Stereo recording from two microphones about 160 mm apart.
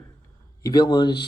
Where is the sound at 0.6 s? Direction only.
25° left (ahead or behind).